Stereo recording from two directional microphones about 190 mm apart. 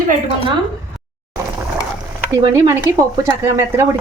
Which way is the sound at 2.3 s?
15° right (ahead or behind).